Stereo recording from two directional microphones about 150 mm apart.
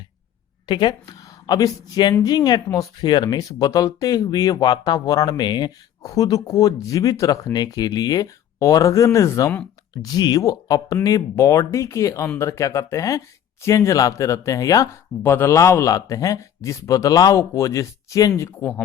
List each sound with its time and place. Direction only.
0.7 s speech: 30° left (ahead or behind)